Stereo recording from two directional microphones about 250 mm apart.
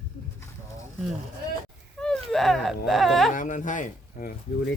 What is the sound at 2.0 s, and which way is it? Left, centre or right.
Speech, centre.